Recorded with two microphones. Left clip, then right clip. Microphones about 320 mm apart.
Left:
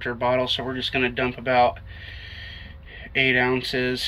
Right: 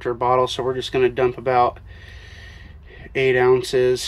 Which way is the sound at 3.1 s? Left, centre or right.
Centre.